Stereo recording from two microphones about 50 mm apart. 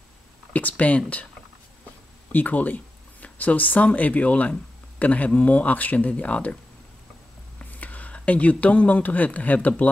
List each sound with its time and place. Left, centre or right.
0.5 s speech: left
2.3 s speech: left